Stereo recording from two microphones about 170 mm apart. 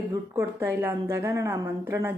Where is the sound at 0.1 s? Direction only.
15° right (ahead or behind).